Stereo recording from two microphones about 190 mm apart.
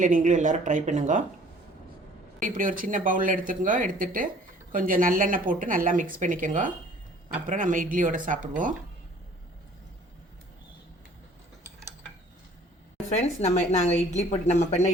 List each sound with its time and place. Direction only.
0.0 s speech: 40° right (ahead or behind)
2.4 s a woman's voice: 45° right (ahead or behind)
13.4 s speech: 35° left (ahead or behind)